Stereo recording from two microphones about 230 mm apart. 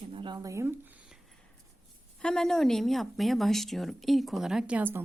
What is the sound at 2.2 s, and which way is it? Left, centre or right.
A woman's voice, centre.